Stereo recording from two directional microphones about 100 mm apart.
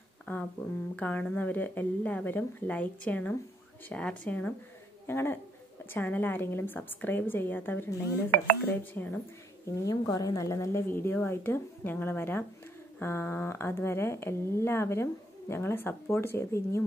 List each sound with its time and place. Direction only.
0.2 s a sound: 15° left (ahead or behind)
0.9 s speech: 15° left (ahead or behind)
9.8 s speech: 40° left (ahead or behind)